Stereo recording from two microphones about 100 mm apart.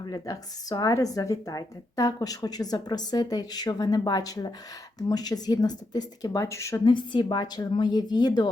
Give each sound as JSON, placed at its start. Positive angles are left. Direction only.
{"t": 0.0, "sound": "speech", "side_deg": 40}
{"t": 6.8, "sound": "a woman's voice", "side_deg": 50}